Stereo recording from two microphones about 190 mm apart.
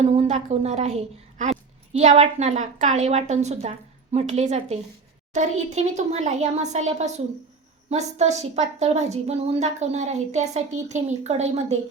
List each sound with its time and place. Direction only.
0.1 s a woman's voice: 35° right (ahead or behind)